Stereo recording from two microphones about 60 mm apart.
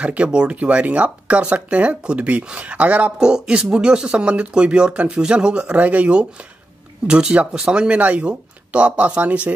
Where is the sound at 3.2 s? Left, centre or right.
Centre.